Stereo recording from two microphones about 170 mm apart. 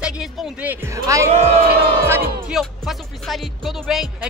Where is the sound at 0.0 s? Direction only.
5° right (ahead or behind).